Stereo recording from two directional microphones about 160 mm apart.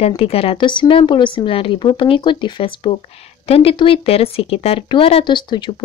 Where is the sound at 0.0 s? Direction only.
35° left (ahead or behind).